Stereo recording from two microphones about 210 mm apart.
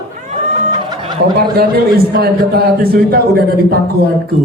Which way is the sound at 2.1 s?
45° right (ahead or behind).